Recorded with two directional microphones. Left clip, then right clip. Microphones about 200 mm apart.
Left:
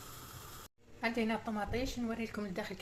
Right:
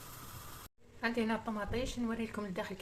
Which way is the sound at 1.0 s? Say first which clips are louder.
Even; centre (ahead or behind).